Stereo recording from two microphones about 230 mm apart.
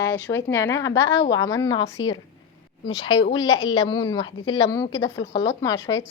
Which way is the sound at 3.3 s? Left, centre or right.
Centre.